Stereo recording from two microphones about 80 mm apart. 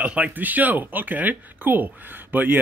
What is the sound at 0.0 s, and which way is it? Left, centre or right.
Speech, centre.